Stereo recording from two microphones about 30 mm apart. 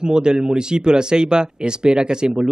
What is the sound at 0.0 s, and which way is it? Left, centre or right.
A man's voice, right.